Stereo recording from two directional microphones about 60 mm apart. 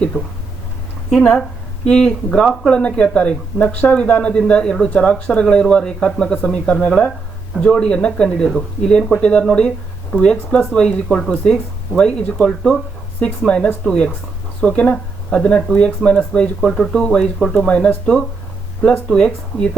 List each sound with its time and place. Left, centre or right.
0.1 s speech: right
1.2 s speech: centre
16.6 s speech: centre
17.7 s speech: centre